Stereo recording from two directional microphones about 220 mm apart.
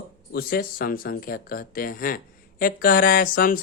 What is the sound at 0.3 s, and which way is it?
Speech, 40° left (ahead or behind).